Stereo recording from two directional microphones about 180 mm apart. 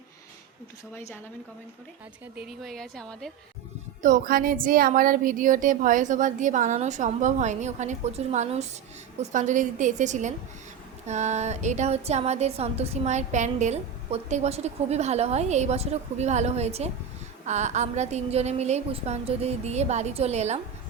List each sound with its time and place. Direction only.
0.9 s a woman's voice: 10° left (ahead or behind)
2.3 s speech: 5° right (ahead or behind)
4.0 s a woman's voice: 50° right (ahead or behind)